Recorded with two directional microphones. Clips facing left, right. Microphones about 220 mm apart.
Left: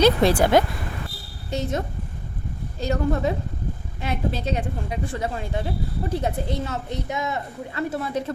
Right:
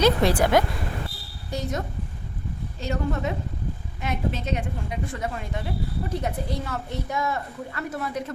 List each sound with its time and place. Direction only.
0.0 s a woman's voice: 30° left (ahead or behind)
2.8 s a woman's voice: 35° left (ahead or behind)